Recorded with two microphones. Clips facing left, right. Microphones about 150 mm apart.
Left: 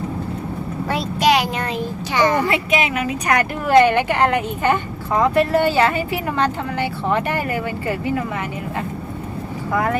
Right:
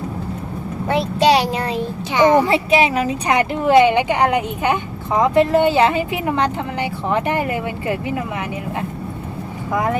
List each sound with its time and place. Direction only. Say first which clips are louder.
0.9 s a child's voice: right 3 dB; 25° right (ahead or behind)
2.1 s a woman's voice: right 5 dB; 20° right (ahead or behind)
2.5 s a woman's voice: right 4 dB; 30° right (ahead or behind)
9.7 s speech: even; 15° right (ahead or behind)